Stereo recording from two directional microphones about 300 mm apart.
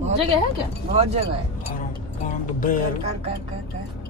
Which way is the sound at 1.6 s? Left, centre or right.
Left.